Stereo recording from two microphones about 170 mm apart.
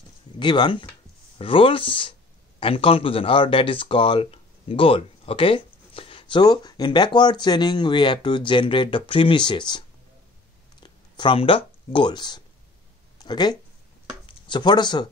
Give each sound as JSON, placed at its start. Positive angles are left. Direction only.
{"t": 0.4, "sound": "speech", "side_deg": 30}